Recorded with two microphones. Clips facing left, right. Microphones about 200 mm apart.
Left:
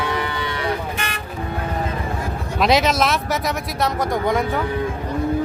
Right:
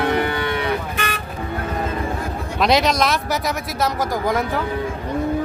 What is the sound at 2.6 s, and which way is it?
Speech, centre (ahead or behind).